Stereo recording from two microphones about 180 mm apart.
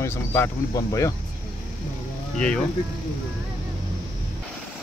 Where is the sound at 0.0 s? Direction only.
15° left (ahead or behind).